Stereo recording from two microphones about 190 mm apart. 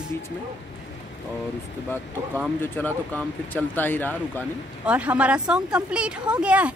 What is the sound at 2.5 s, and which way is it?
Speech, 10° left (ahead or behind).